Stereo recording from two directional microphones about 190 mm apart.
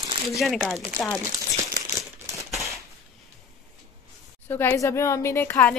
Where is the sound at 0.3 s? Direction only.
Centre (ahead or behind).